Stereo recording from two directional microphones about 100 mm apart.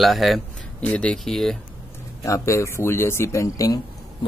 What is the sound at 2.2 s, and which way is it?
Speech, 30° left (ahead or behind).